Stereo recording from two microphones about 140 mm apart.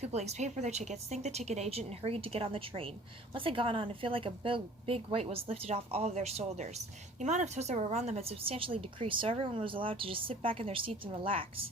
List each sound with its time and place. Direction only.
0.0 s speech: 50° right (ahead or behind)